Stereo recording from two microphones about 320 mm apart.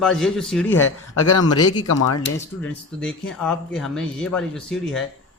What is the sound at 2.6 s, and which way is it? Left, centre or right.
Speech, centre.